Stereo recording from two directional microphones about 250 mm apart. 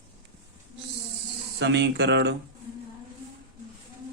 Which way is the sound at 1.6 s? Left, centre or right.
Right.